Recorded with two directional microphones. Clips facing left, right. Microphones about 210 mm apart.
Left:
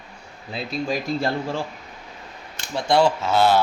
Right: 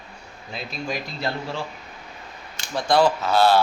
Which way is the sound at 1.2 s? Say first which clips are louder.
Left 4 dB; 50° left (ahead or behind).